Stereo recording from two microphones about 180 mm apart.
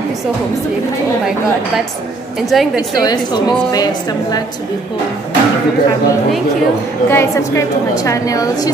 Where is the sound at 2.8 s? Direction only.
20° left (ahead or behind).